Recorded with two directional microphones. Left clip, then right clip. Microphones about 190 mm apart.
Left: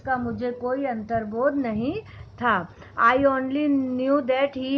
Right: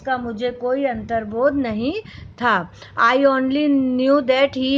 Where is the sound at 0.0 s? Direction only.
35° right (ahead or behind).